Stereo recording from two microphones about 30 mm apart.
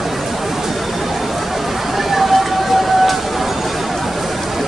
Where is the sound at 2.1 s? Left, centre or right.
Centre.